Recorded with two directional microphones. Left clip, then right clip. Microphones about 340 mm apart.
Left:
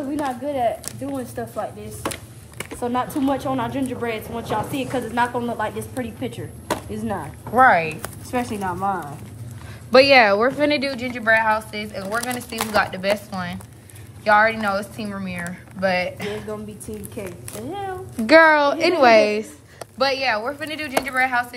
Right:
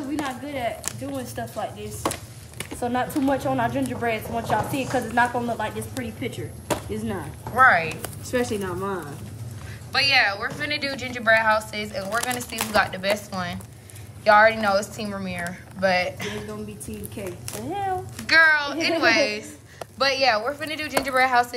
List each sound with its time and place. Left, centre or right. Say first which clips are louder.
0.1 s a woman's voice: left 5 dB; centre
7.1 s a woman's voice: left 4 dB; centre
8.0 s a child's voice: even; centre
9.9 s a woman's voice: left 7 dB; centre
17.5 s a woman's voice: right 4 dB; centre
18.2 s a child's voice: left 5 dB; centre